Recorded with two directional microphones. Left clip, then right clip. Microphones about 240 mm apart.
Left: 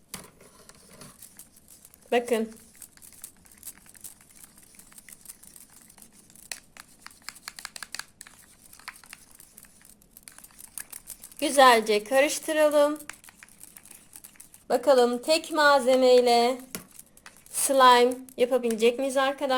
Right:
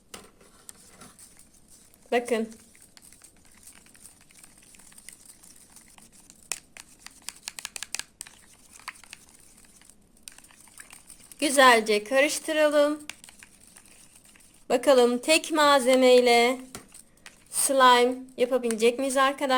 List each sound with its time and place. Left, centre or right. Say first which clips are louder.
2.0 s speech: left 1 dB; centre
7.3 s computer keyboard: right 1 dB; centre
8.8 s crumpling: right 2 dB; centre
11.3 s a woman's voice: even; centre
14.7 s a woman's voice: right 1 dB; centre
17.2 s a woman's voice: even; centre